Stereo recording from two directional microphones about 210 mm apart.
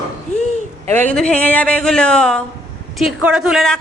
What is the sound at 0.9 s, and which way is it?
A man's voice, 5° left (ahead or behind).